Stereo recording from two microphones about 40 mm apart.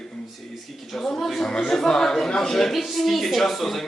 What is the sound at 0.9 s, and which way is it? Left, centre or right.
Speech, centre.